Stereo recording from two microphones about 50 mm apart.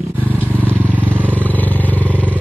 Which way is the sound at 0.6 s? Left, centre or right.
Right.